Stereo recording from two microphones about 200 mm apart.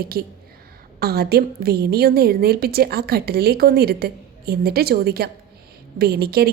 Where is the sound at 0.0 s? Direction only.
50° right (ahead or behind).